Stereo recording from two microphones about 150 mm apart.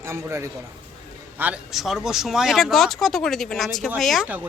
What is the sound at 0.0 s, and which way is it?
Speech, 15° right (ahead or behind).